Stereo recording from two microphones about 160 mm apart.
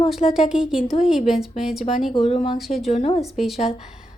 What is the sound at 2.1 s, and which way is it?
Speech, 40° left (ahead or behind).